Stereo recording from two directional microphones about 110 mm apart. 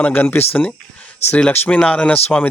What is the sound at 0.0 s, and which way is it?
Speech, 15° left (ahead or behind).